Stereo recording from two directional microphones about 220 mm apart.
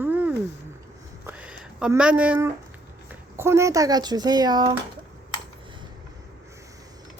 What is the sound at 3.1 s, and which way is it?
Speech, 10° right (ahead or behind).